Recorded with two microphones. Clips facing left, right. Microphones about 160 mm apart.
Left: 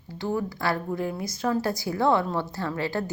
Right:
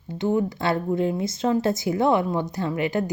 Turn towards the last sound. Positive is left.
turn(degrees=-20)  # may be behind; listen again after turning